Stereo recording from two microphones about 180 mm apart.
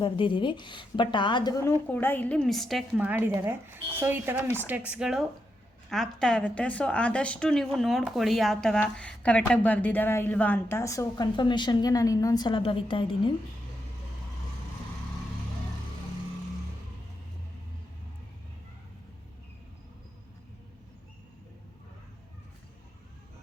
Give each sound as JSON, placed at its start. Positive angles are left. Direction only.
{"t": 0.0, "sound": "a woman's voice", "side_deg": 25}